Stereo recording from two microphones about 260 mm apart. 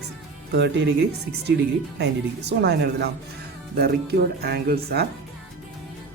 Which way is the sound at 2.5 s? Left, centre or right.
Right.